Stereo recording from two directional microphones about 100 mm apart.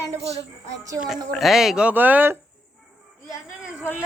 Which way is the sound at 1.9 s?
20° right (ahead or behind).